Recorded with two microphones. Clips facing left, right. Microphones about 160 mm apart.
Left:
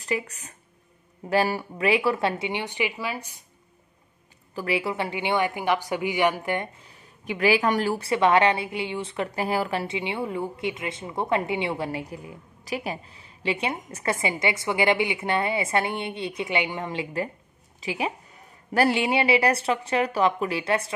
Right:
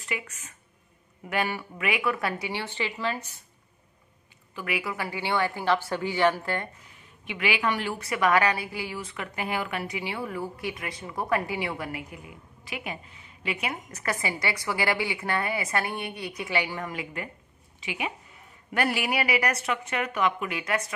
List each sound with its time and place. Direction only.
0.0 s a woman's voice: 35° left (ahead or behind); by 3.4 s 15° left (ahead or behind)
4.6 s a woman's voice: 30° left (ahead or behind)
6.9 s a woman's voice: 40° left (ahead or behind)